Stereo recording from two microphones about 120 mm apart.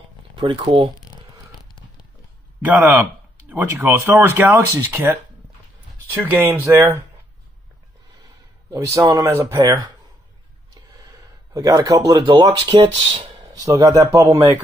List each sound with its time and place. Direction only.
0.4 s speech: 45° right (ahead or behind)
0.9 s a sound: 35° left (ahead or behind)
2.6 s speech: 15° right (ahead or behind)
8.6 s speech: 25° right (ahead or behind)
11.5 s speech: 30° right (ahead or behind)
13.6 s speech: 30° right (ahead or behind)